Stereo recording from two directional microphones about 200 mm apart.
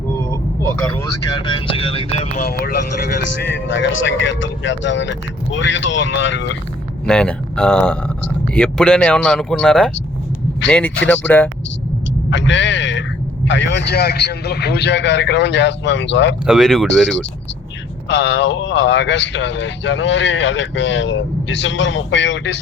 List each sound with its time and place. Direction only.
0.3 s vehicle: 10° left (ahead or behind)
1.3 s music: 25° left (ahead or behind)
2.4 s speech: 50° left (ahead or behind)
3.5 s speech: 65° left (ahead or behind)
7.0 s speech: 5° left (ahead or behind)
12.3 s speech: 65° left (ahead or behind)
16.5 s speech: centre (ahead or behind)
18.1 s speech: 60° left (ahead or behind)